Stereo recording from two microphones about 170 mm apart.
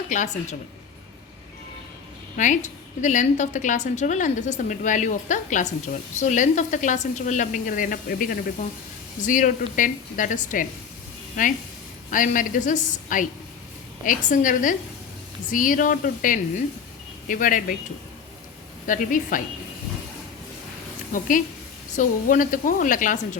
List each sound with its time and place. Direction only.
0.1 s a woman's voice: 45° left (ahead or behind)
2.3 s a woman's voice: 45° left (ahead or behind)
12.1 s a woman's voice: 50° left (ahead or behind)
18.9 s a woman's voice: 50° left (ahead or behind)
21.1 s a woman's voice: 50° left (ahead or behind)